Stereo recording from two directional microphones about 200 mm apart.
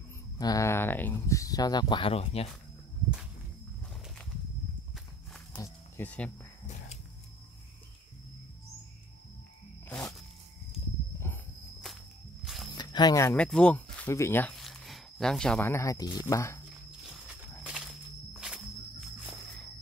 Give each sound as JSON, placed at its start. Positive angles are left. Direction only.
{"t": 0.4, "sound": "speech", "side_deg": 15}
{"t": 4.9, "sound": "walk", "side_deg": 5}
{"t": 5.6, "sound": "cricket", "side_deg": 10}
{"t": 9.8, "sound": "frog", "side_deg": 5}
{"t": 11.3, "sound": "walk", "side_deg": 10}
{"t": 12.7, "sound": "speech", "side_deg": 20}
{"t": 17.0, "sound": "walk", "side_deg": 0}